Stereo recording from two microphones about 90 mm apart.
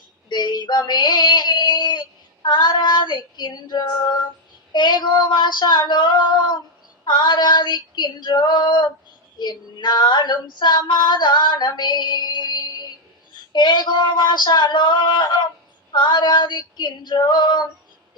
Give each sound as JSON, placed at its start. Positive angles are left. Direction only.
{"t": 0.3, "sound": "female singing", "side_deg": 55}